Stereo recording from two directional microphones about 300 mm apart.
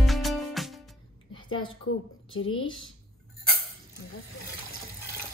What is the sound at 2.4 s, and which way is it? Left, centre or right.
Speech, centre.